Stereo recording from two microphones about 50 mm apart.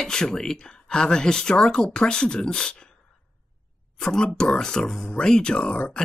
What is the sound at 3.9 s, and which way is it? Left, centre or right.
Speech, centre.